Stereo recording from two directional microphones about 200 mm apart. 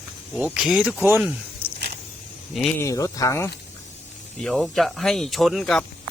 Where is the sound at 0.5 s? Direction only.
5° right (ahead or behind).